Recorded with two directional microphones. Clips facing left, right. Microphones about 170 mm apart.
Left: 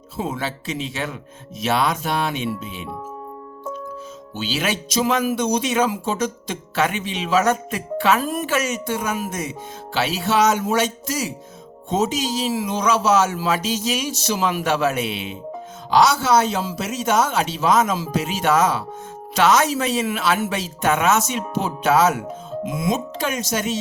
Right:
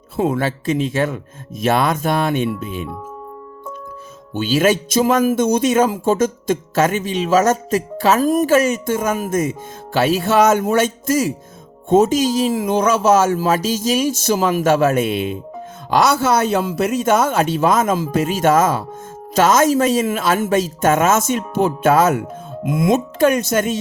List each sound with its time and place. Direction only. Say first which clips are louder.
0.2 s speech: right 8 dB; 55° right (ahead or behind)
4.4 s speech: right 9 dB; 50° right (ahead or behind)